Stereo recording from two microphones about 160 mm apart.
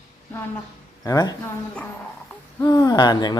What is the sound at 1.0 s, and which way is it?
Speech, 25° left (ahead or behind).